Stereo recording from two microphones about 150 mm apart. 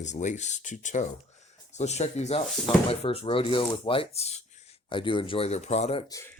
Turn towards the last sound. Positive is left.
turn(degrees=20)  # may be behind; listen again after turning